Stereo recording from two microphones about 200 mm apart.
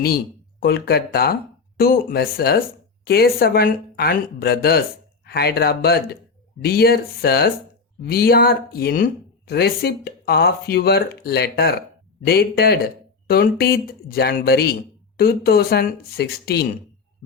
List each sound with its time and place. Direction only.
0.6 s speech: 50° left (ahead or behind)